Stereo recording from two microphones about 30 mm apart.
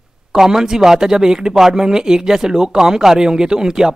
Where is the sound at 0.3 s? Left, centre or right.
Centre.